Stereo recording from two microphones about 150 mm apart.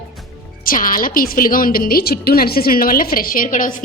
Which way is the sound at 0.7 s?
70° left (ahead or behind).